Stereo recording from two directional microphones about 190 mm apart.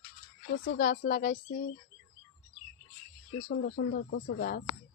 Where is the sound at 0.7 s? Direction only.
45° left (ahead or behind).